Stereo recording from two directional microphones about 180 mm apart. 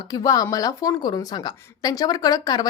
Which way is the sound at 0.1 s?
20° left (ahead or behind).